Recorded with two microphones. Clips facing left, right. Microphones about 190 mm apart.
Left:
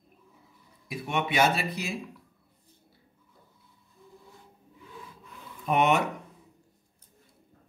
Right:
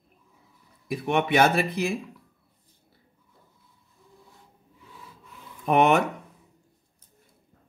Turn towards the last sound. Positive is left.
turn(degrees=-55)  # may be behind; listen again after turning